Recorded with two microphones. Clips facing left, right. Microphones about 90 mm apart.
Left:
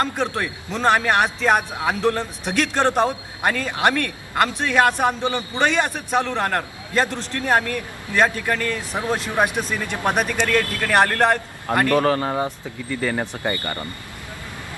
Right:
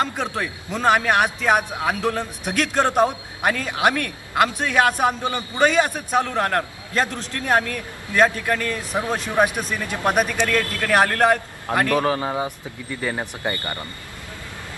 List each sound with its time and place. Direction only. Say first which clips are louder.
0.0 s a man's voice: left 1 dB; centre (ahead or behind); by 13.6 s 15° right (ahead or behind)